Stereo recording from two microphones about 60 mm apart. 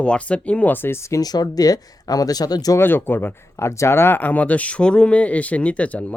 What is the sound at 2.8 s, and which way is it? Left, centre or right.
Speech, left.